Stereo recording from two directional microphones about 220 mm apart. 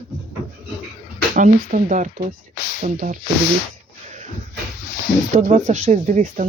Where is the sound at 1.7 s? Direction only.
35° right (ahead or behind).